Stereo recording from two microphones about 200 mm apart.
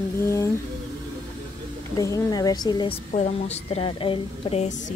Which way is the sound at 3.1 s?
30° left (ahead or behind).